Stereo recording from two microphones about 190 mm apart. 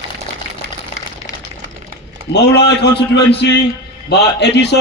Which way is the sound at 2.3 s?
60° left (ahead or behind).